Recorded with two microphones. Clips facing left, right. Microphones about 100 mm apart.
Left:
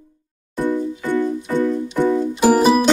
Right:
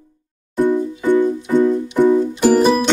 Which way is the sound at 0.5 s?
15° right (ahead or behind).